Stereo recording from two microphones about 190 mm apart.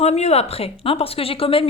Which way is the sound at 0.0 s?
35° left (ahead or behind).